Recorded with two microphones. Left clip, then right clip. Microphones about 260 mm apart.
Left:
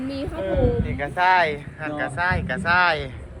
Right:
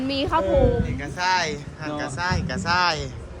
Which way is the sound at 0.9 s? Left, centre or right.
Centre.